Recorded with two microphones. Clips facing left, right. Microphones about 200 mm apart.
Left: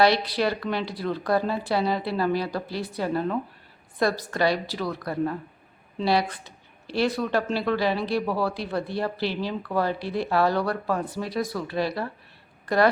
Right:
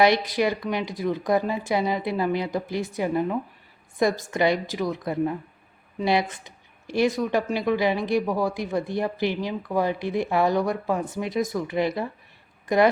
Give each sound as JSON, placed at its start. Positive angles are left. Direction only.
{"t": 0.0, "sound": "speech", "side_deg": -15}